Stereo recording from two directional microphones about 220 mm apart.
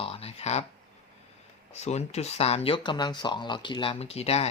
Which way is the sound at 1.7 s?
30° left (ahead or behind).